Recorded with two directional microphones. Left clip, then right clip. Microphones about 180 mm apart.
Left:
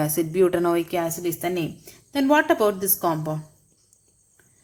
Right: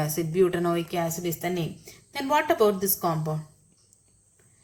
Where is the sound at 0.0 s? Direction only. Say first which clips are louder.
Left 3 dB; 45° left (ahead or behind).